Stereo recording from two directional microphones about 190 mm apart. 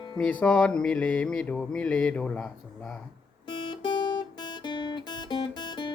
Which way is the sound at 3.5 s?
25° left (ahead or behind).